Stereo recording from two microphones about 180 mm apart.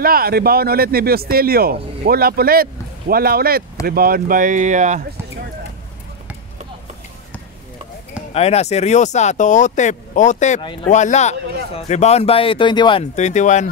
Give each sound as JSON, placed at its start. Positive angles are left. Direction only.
{"t": 0.0, "sound": "speech", "side_deg": -55}
{"t": 8.3, "sound": "speech", "side_deg": 35}
{"t": 13.0, "sound": "speech", "side_deg": 40}